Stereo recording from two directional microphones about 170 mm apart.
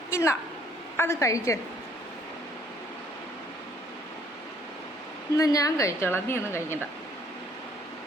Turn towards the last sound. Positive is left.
turn(degrees=15)  # may be behind; listen again after turning